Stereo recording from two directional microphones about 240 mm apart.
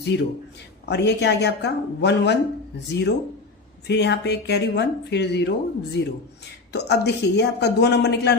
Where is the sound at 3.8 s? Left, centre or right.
Left.